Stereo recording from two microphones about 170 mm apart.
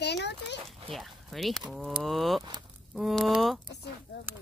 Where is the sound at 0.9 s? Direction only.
Centre (ahead or behind).